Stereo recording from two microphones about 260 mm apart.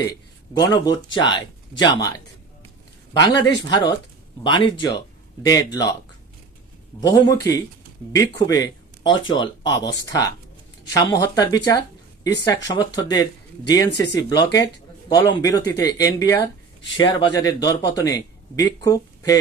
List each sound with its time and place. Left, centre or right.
0.6 s speech: centre
7.0 s a woman's voice: centre
14.0 s speech: left
14.5 s speech: centre